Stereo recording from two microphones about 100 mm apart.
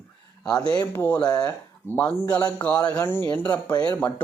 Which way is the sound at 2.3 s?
15° left (ahead or behind).